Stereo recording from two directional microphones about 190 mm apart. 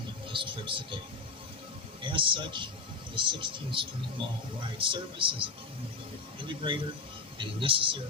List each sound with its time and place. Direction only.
0.3 s speech: 25° right (ahead or behind)
2.0 s speech: 25° right (ahead or behind)
6.6 s speech: 25° right (ahead or behind)